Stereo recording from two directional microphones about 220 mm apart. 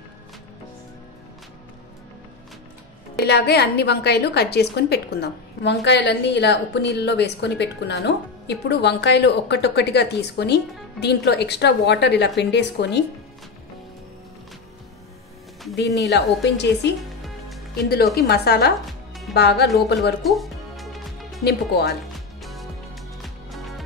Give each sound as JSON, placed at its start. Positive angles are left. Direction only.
{"t": 3.2, "sound": "a woman's voice", "side_deg": 50}
{"t": 15.7, "sound": "a woman's voice", "side_deg": 50}
{"t": 18.1, "sound": "a woman's voice", "side_deg": 45}
{"t": 18.9, "sound": "music", "side_deg": 0}
{"t": 19.3, "sound": "a woman's voice", "side_deg": 50}
{"t": 20.2, "sound": "music", "side_deg": 0}
{"t": 21.5, "sound": "a woman's voice", "side_deg": 50}
{"t": 22.4, "sound": "music", "side_deg": 0}